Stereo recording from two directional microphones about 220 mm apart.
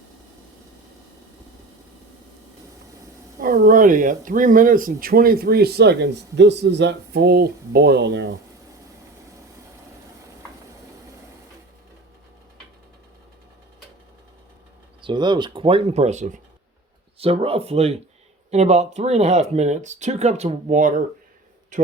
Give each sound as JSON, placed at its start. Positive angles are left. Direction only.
{"t": 3.4, "sound": "speech", "side_deg": -40}
{"t": 15.0, "sound": "a man's voice", "side_deg": -20}